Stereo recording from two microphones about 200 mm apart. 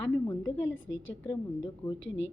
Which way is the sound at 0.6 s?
75° left (ahead or behind).